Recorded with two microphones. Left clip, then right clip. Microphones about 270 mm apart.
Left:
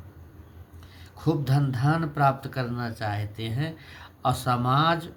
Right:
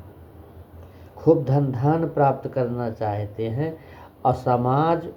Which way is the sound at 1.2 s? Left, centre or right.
Centre.